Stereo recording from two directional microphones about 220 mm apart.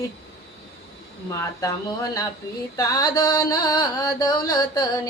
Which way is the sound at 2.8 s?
15° left (ahead or behind).